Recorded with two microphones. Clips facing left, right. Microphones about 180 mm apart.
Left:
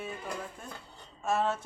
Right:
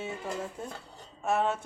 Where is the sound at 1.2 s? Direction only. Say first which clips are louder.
Right 1 dB; 15° right (ahead or behind).